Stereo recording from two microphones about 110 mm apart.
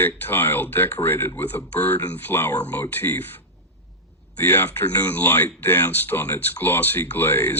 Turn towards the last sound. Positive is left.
turn(degrees=20)  # may be behind; listen again after turning